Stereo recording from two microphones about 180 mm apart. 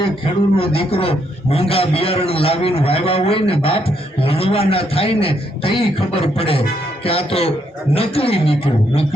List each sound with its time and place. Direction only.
0.6 s a man's voice: 30° left (ahead or behind)